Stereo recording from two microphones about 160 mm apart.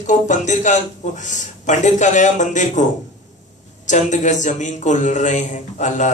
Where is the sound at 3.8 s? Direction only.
50° left (ahead or behind).